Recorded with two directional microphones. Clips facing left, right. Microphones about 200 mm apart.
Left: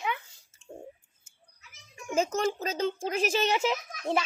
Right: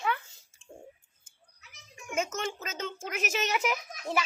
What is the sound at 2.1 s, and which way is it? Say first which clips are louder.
A child's voice: left 5 dB; 35° left (ahead or behind).